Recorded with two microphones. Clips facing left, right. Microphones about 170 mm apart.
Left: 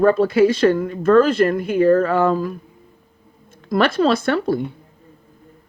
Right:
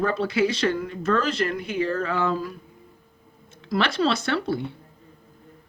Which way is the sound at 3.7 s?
50° left (ahead or behind).